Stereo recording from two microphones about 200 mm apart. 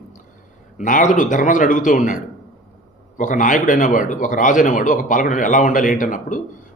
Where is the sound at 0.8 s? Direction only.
40° left (ahead or behind).